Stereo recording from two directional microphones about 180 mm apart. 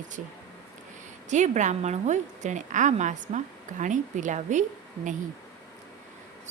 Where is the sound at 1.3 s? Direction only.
40° right (ahead or behind).